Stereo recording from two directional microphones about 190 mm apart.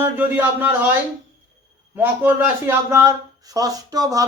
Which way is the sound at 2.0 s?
10° right (ahead or behind).